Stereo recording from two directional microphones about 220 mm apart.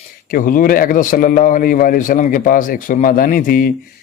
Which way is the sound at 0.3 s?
40° left (ahead or behind).